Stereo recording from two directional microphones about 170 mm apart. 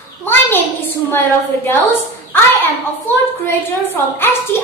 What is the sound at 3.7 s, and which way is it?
Speech, 15° left (ahead or behind).